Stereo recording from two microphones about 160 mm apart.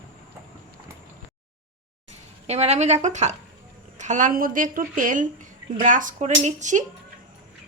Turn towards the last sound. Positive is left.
turn(degrees=-50)  # may be behind; listen again after turning